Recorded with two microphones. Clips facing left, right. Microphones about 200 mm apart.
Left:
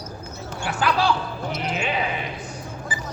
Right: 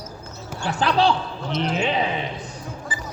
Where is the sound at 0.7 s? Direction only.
30° right (ahead or behind).